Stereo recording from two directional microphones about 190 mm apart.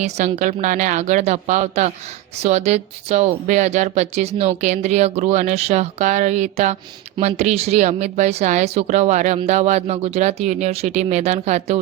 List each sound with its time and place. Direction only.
0.0 s speech: 40° right (ahead or behind)